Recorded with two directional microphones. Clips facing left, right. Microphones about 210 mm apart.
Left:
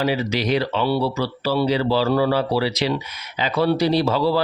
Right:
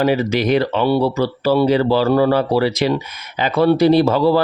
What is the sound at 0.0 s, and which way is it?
A man's voice, 50° right (ahead or behind).